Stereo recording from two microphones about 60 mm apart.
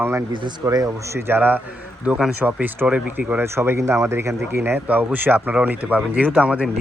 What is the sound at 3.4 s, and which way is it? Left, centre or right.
Speech, right.